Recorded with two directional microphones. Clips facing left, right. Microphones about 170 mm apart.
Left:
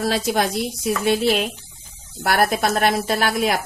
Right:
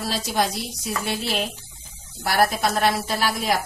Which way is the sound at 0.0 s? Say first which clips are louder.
Left 4 dB; 55° left (ahead or behind).